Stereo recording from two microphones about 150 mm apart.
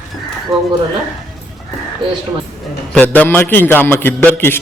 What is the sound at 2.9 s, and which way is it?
A man's voice, 10° left (ahead or behind).